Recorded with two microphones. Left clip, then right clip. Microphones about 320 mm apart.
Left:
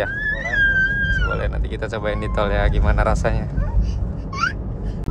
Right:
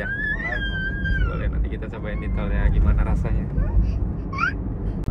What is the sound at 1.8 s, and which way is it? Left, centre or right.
Speech, left.